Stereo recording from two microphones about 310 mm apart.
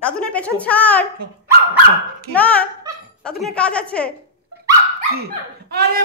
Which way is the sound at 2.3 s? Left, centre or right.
Centre.